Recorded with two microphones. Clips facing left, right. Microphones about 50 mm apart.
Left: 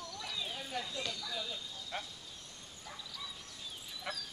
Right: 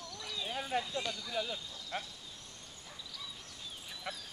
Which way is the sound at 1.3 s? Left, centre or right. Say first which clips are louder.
Right 4 dB; right.